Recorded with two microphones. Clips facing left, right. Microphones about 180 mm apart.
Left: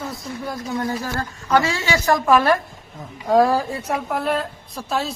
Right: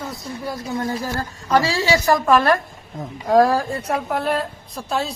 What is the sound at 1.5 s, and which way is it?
Speech, 35° right (ahead or behind).